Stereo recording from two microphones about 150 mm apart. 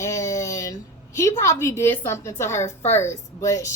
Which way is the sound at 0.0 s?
20° left (ahead or behind).